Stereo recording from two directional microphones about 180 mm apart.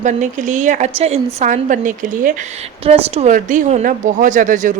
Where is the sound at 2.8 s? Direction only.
35° right (ahead or behind).